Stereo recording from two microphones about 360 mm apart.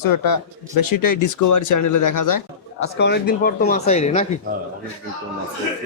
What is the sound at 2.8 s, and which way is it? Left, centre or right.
Speech, left.